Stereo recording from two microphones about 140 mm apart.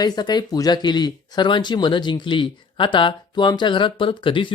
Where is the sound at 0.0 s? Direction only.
30° left (ahead or behind).